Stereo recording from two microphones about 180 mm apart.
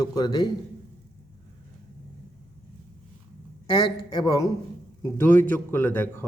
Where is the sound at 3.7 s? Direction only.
25° left (ahead or behind).